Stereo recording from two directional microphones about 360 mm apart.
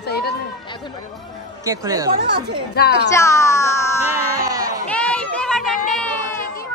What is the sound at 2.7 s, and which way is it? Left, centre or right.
Speech, left.